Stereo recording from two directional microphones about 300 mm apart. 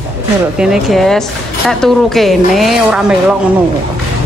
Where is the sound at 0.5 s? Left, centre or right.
Centre.